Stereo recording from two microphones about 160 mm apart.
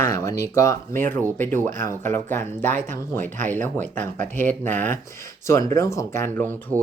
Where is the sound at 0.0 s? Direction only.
15° left (ahead or behind).